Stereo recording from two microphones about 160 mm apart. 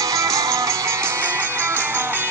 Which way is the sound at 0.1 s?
20° right (ahead or behind).